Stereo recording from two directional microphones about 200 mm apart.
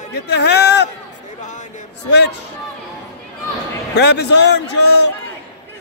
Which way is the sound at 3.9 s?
55° left (ahead or behind).